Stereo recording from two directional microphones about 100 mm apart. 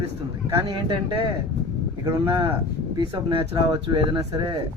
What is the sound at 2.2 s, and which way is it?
Speech, 60° right (ahead or behind).